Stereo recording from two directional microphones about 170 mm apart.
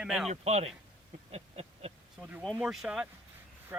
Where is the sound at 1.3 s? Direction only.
40° right (ahead or behind).